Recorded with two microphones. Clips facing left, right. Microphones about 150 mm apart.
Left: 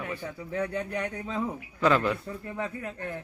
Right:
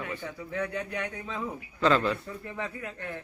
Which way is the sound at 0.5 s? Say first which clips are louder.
Left 2 dB; 30° left (ahead or behind).